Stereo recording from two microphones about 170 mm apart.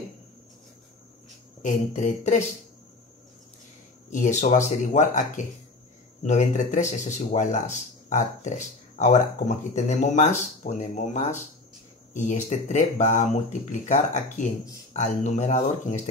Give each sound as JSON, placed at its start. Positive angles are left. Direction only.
{"t": 1.6, "sound": "speech", "side_deg": 45}
{"t": 4.1, "sound": "speech", "side_deg": 45}